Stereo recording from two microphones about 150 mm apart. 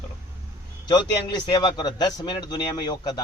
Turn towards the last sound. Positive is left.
turn(degrees=25)  # may be behind; listen again after turning